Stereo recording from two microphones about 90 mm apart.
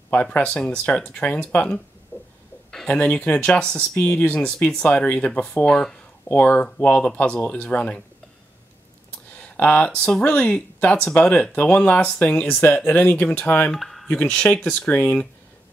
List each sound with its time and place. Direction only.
0.1 s speech: 15° left (ahead or behind)
2.1 s throbbing: 25° left (ahead or behind)
2.7 s speech: 10° left (ahead or behind)
9.3 s speech: 15° left (ahead or behind)
13.7 s a sound: centre (ahead or behind)
14.0 s speech: 10° left (ahead or behind)